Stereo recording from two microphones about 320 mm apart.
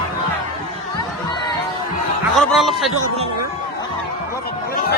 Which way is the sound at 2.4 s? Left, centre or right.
Centre.